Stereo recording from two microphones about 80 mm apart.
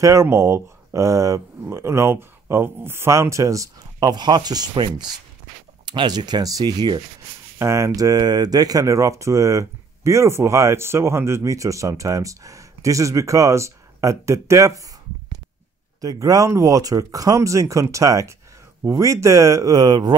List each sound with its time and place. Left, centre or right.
0.0 s speech: right
4.1 s speech: right
7.5 s speech: right
16.0 s speech: right
19.7 s speech: right